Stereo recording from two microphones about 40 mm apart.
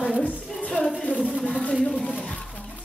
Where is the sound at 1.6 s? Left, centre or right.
Left.